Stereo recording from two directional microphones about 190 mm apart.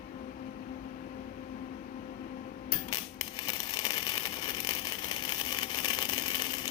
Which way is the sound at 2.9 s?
25° left (ahead or behind).